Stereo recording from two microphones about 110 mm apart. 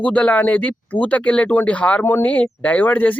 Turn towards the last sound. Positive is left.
turn(degrees=15)  # may be behind; listen again after turning